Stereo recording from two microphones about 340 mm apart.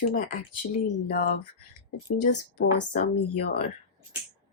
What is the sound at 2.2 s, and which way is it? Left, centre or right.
Speech, left.